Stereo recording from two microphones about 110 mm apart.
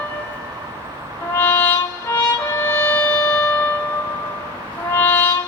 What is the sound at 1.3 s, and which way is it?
Music, 20° left (ahead or behind).